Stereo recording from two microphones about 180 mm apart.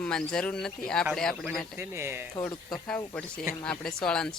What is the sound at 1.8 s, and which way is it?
Speech, 15° right (ahead or behind).